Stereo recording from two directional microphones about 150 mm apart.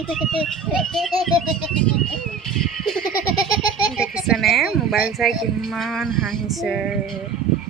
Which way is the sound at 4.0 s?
5° right (ahead or behind).